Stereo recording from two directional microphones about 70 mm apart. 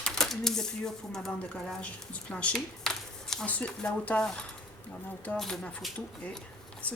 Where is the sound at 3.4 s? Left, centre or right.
Centre.